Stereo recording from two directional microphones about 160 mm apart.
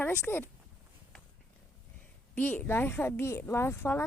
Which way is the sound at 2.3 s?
10° left (ahead or behind).